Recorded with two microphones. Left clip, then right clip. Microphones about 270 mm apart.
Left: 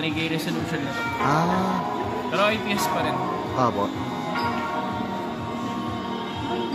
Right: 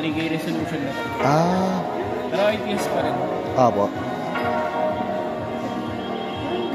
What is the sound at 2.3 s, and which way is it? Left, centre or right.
Speech, left.